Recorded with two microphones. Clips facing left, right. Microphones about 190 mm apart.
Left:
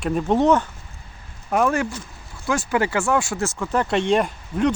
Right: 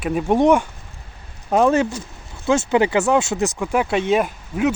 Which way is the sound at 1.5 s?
25° right (ahead or behind).